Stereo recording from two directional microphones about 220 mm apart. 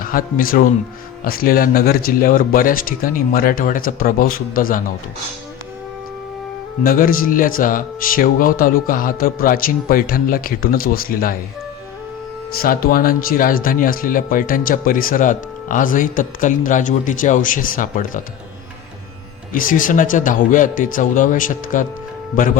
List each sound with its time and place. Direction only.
0.0 s speech: 40° left (ahead or behind)
6.8 s speech: 40° left (ahead or behind)
12.5 s speech: 40° left (ahead or behind)
19.5 s speech: 40° left (ahead or behind)